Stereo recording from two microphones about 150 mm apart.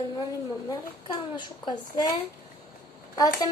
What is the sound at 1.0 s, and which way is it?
A child's voice, 30° left (ahead or behind).